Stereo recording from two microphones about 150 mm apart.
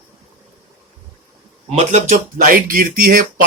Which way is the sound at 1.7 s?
50° right (ahead or behind).